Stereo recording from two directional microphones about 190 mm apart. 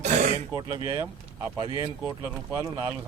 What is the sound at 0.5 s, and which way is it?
Speech, 25° right (ahead or behind).